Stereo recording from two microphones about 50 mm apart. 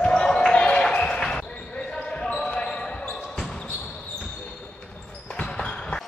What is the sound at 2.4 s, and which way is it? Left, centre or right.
Basketball bounce, left.